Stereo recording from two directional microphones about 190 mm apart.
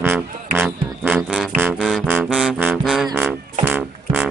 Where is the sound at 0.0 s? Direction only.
10° right (ahead or behind).